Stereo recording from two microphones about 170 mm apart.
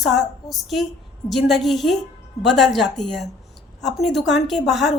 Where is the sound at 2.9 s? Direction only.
Centre (ahead or behind).